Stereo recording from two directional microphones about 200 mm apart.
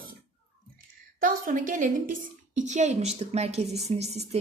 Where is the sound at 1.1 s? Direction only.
45° right (ahead or behind).